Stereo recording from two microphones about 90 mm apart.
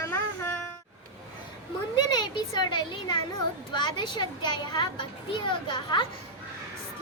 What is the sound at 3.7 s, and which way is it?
A child's voice, 55° left (ahead or behind).